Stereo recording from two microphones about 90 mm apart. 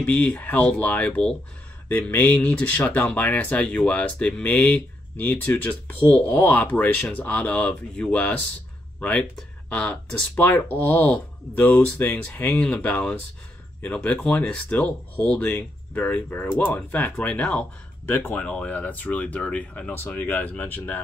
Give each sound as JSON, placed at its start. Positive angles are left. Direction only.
{"t": 0.0, "sound": "speech", "side_deg": 15}
{"t": 9.7, "sound": "speech", "side_deg": 10}